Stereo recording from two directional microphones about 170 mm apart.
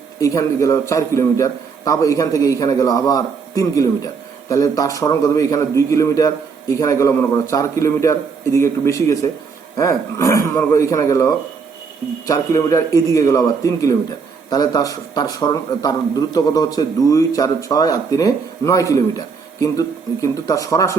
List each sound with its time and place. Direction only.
0.2 s a man's voice: 20° left (ahead or behind)